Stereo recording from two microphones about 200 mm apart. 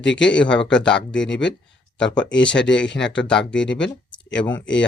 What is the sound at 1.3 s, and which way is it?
Speech, 65° left (ahead or behind).